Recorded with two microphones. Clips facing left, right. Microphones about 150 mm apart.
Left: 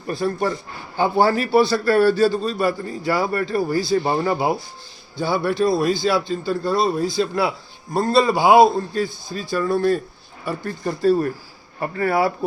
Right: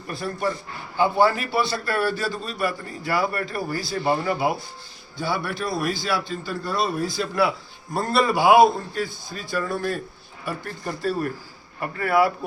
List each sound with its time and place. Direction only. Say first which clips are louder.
0.1 s a man's voice: left 5 dB; 30° left (ahead or behind)
5.2 s a man's voice: left 7 dB; 30° left (ahead or behind)